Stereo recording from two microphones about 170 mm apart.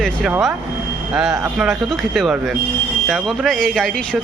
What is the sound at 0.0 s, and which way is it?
Speech, 5° right (ahead or behind).